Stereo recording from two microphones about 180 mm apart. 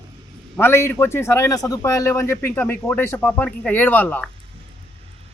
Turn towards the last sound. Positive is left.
turn(degrees=10)  # may be behind; listen again after turning